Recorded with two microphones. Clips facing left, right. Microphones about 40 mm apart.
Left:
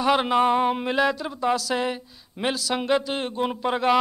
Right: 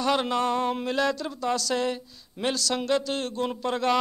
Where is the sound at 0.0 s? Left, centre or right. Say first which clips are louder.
Left 5 dB; centre.